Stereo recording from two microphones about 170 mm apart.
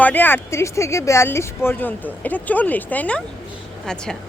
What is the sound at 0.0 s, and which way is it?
Speech, 10° left (ahead or behind).